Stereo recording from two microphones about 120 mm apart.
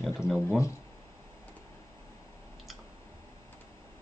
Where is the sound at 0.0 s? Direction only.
5° right (ahead or behind).